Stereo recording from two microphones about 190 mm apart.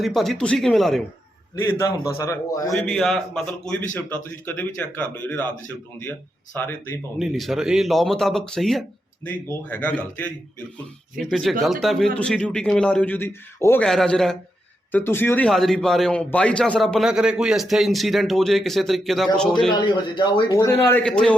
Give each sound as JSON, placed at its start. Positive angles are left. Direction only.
{"t": 0.0, "sound": "a man's voice", "side_deg": 0}
{"t": 1.6, "sound": "speech", "side_deg": 15}
{"t": 2.7, "sound": "a man's voice", "side_deg": 0}
{"t": 6.6, "sound": "speech", "side_deg": 10}
{"t": 7.2, "sound": "a man's voice", "side_deg": 0}
{"t": 19.8, "sound": "speech", "side_deg": 25}
{"t": 20.7, "sound": "a man's voice", "side_deg": 10}